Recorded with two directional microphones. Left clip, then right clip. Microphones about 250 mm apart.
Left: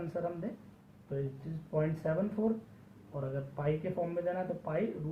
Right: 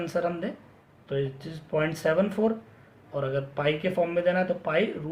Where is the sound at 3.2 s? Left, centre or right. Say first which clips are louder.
Right 11 dB; right.